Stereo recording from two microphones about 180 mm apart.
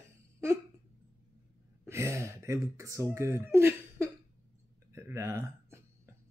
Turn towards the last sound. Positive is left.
turn(degrees=-15)  # may be behind; listen again after turning